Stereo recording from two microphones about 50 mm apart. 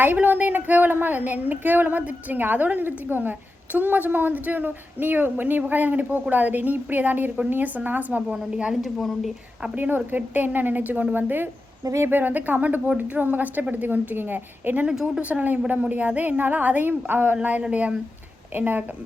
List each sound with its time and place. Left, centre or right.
0.0 s a woman's voice: right
8.8 s speech: centre
9.7 s a woman's voice: right
14.8 s speech: centre
15.2 s a woman's voice: right
17.3 s a woman's voice: right